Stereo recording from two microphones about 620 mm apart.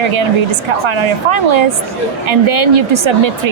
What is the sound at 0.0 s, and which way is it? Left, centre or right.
A woman's voice, right.